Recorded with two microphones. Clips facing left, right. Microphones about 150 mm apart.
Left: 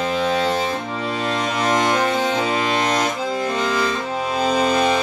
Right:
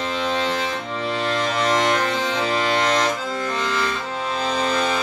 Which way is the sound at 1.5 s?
15° left (ahead or behind).